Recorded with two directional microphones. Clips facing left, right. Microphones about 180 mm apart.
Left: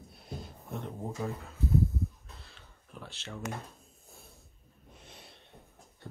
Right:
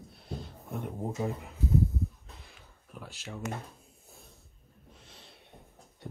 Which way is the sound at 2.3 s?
15° right (ahead or behind).